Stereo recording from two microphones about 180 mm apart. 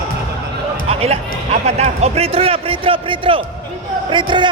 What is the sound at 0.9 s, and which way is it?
A man's voice, 35° right (ahead or behind).